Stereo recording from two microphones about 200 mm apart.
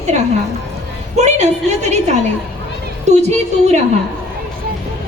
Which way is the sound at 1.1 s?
35° right (ahead or behind).